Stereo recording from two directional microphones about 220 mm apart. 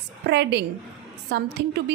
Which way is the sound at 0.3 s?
50° right (ahead or behind).